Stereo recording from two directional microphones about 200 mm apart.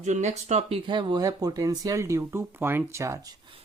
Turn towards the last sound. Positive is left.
turn(degrees=-25)  # may be behind; listen again after turning